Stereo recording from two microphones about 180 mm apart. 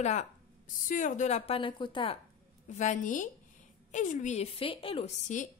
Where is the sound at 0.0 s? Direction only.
40° left (ahead or behind).